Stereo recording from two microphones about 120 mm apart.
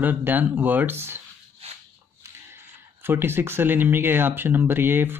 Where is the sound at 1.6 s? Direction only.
55° right (ahead or behind).